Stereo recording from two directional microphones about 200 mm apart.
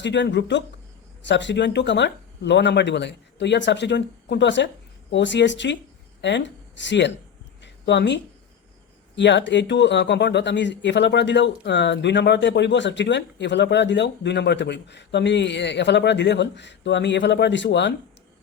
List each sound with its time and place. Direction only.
0.0 s speech: 60° left (ahead or behind)
7.6 s a sound: 60° left (ahead or behind)
9.1 s speech: 60° left (ahead or behind)